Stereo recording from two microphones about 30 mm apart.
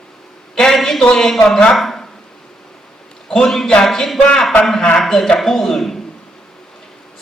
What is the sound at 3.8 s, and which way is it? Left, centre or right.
A man's voice, centre.